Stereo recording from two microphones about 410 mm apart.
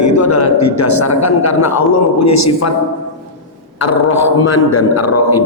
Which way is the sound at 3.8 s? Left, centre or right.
Left.